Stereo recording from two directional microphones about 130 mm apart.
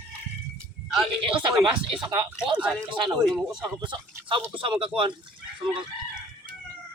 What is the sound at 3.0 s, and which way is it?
Speech, 5° left (ahead or behind).